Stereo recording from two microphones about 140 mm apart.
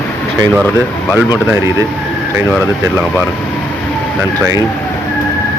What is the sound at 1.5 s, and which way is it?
Speech, 20° right (ahead or behind).